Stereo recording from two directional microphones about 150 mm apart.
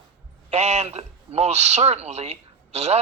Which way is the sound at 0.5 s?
45° right (ahead or behind).